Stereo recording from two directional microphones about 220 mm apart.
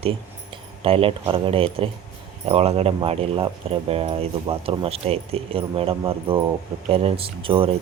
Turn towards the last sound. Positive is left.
turn(degrees=-25)  # may be behind; listen again after turning